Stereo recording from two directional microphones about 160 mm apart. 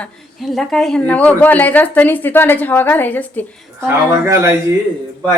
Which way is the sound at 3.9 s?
15° right (ahead or behind).